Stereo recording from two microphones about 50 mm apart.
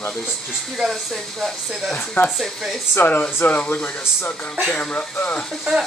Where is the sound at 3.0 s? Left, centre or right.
Left.